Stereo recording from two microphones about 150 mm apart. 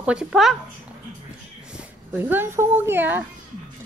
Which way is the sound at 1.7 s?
10° right (ahead or behind).